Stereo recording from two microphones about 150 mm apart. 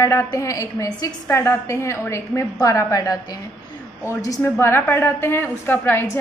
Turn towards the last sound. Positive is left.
turn(degrees=15)  # may be behind; listen again after turning